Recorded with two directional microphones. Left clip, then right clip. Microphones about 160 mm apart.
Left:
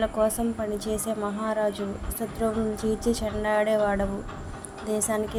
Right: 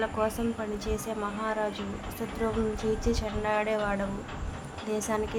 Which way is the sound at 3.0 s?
20° left (ahead or behind).